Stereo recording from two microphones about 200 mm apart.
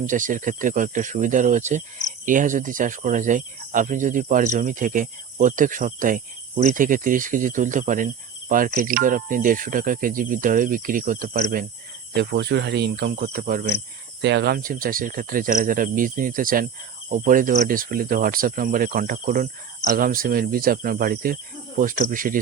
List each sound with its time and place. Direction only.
0.0 s speech: 40° right (ahead or behind)
12.1 s speech: 55° right (ahead or behind)
14.2 s speech: 60° right (ahead or behind); by 22.4 s 45° right (ahead or behind)